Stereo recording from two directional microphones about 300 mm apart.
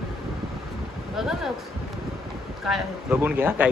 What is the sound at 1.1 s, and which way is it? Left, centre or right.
Speech, centre.